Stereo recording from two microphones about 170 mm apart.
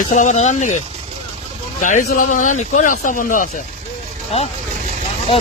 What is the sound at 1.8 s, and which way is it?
A man's voice, 50° left (ahead or behind).